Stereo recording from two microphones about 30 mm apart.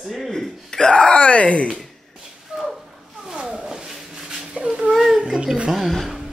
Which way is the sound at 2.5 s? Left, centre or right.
Right.